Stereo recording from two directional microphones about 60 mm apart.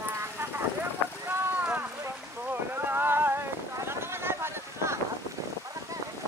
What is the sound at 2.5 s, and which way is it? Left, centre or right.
Boat, right.